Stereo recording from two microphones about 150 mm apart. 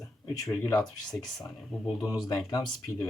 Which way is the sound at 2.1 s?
25° left (ahead or behind).